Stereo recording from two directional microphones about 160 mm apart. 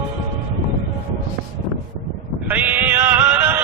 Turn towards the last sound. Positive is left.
turn(degrees=-10)  # may be behind; listen again after turning